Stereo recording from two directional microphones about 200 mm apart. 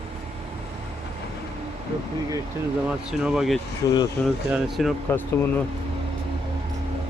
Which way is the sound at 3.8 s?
15° left (ahead or behind).